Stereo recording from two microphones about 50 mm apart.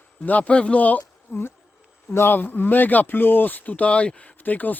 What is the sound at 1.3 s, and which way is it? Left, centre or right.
Speech, left.